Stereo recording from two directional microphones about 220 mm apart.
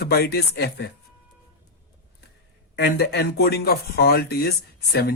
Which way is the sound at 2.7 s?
45° left (ahead or behind).